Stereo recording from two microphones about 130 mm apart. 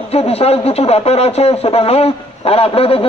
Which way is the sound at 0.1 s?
50° left (ahead or behind).